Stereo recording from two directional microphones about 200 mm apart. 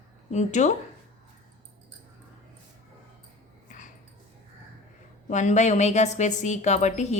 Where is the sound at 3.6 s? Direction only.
40° left (ahead or behind).